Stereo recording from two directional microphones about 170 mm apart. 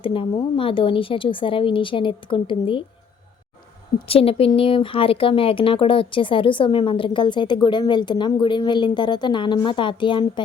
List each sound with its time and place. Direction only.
0.0 s speech: 30° left (ahead or behind)
3.9 s speech: 35° left (ahead or behind)